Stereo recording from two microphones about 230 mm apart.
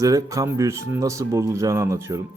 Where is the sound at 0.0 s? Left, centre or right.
Centre.